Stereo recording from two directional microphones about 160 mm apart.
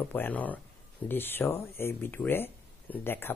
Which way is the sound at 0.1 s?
10° left (ahead or behind).